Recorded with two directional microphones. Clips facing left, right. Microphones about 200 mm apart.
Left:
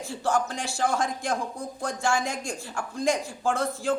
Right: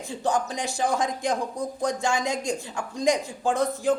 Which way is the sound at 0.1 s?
20° right (ahead or behind).